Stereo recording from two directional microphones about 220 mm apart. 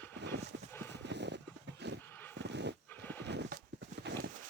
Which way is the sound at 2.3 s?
50° right (ahead or behind).